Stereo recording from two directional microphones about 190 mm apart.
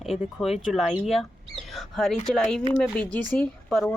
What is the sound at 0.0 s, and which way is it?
Speech, centre (ahead or behind).